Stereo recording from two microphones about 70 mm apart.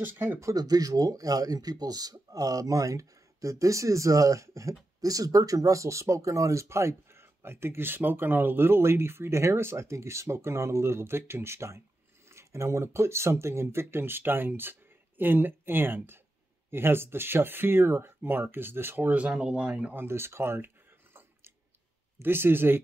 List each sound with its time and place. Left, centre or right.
0.0 s speech: right
0.4 s speech: right
19.1 s speech: centre
20.0 s a sound: right
22.2 s speech: right